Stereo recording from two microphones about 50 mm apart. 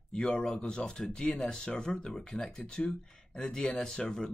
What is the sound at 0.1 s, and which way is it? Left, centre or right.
Speech, centre.